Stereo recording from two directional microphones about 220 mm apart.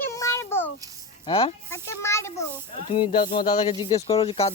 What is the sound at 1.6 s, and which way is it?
Speech, 10° left (ahead or behind).